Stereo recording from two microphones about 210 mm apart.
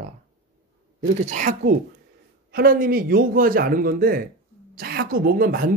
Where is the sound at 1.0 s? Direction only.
35° right (ahead or behind).